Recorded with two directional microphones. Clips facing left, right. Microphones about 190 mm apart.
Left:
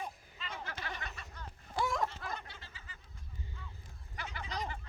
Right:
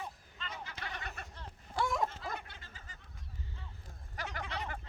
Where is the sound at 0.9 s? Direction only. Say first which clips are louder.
Right 2 dB; 55° right (ahead or behind).